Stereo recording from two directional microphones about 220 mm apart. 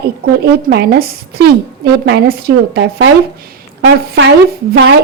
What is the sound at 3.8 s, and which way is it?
A woman's voice, 55° right (ahead or behind).